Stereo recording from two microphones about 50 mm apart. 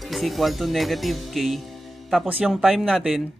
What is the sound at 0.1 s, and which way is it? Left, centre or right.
Speech, centre.